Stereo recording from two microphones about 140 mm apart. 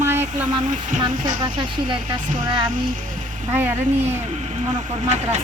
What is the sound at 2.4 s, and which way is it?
Speech, 35° right (ahead or behind).